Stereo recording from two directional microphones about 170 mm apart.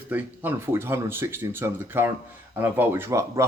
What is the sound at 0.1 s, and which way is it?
Speech, 10° right (ahead or behind).